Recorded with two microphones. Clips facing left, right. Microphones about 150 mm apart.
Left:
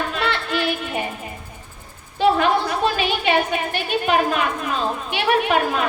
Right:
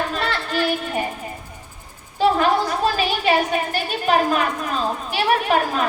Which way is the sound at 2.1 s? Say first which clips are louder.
Even; 40° right (ahead or behind).